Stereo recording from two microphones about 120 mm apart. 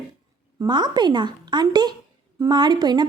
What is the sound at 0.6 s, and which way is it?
A woman's voice, 40° right (ahead or behind).